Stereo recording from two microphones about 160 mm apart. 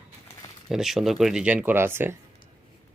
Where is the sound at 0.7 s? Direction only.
Centre (ahead or behind).